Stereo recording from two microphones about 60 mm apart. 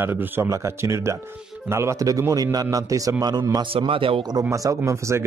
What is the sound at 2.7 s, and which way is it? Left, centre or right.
Speech, right.